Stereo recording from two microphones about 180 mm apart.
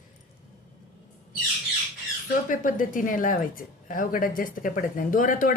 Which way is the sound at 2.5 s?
45° left (ahead or behind).